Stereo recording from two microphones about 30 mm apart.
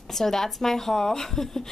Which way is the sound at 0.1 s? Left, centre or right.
Centre.